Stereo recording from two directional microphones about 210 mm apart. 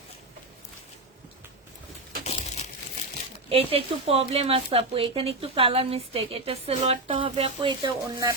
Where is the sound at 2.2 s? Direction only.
30° left (ahead or behind).